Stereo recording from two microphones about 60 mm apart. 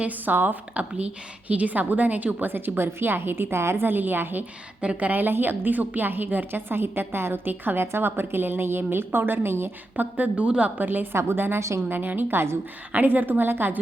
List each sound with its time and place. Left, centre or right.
0.0 s a woman's voice: right
3.8 s a woman's voice: right
4.8 s a woman's voice: right
9.9 s speech: right
10.8 s a woman's voice: right
12.9 s a woman's voice: right